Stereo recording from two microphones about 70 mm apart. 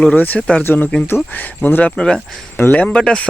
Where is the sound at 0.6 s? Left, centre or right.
Left.